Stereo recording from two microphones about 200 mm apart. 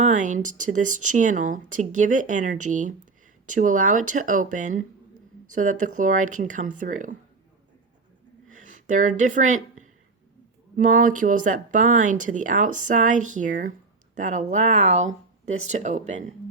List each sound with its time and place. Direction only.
0.0 s speech: 40° right (ahead or behind)
8.5 s speech: 40° right (ahead or behind)